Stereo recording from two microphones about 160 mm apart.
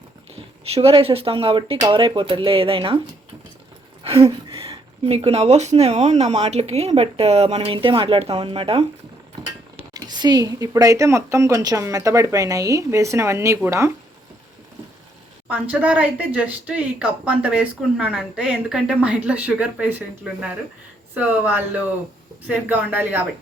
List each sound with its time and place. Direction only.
0.6 s speech: 35° right (ahead or behind)
4.0 s speech: 35° right (ahead or behind)
9.9 s speech: 25° right (ahead or behind)
15.4 s speech: 10° right (ahead or behind)